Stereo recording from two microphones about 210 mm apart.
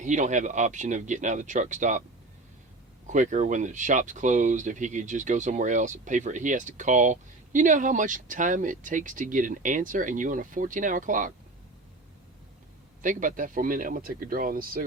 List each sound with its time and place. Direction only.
0.0 s speech: 35° right (ahead or behind)
3.1 s speech: 35° right (ahead or behind)
13.0 s speech: 40° right (ahead or behind)